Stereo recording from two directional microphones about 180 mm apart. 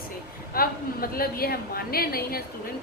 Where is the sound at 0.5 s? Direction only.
55° left (ahead or behind).